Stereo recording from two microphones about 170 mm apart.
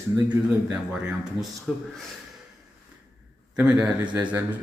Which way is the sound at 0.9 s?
5° right (ahead or behind).